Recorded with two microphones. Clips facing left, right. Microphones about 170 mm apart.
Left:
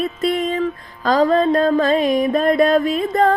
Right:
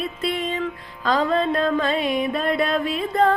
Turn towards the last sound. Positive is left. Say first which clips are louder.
# left 3 dB
turn(degrees=45)  # may be behind; listen again after turning